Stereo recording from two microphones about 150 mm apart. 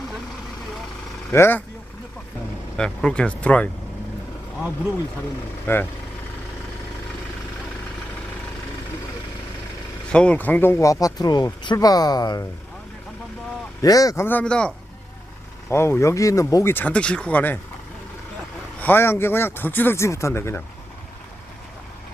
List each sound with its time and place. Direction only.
1.3 s speech: 15° left (ahead or behind)
2.7 s speech: 5° left (ahead or behind)
5.6 s speech: 15° left (ahead or behind)
10.1 s speech: 5° left (ahead or behind); by 12.5 s 25° left (ahead or behind)
13.8 s speech: 25° left (ahead or behind); by 14.7 s 5° left (ahead or behind)
15.7 s speech: 20° left (ahead or behind)
18.8 s speech: 15° left (ahead or behind)